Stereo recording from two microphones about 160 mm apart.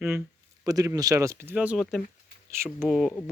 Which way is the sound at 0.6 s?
20° right (ahead or behind).